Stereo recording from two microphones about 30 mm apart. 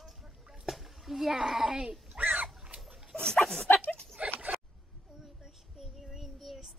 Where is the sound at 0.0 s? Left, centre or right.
Centre.